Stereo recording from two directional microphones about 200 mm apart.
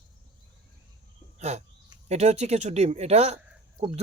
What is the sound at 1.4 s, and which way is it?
Speech, 35° right (ahead or behind).